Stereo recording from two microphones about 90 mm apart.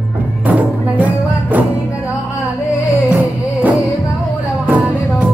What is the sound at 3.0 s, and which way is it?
Music, 20° right (ahead or behind).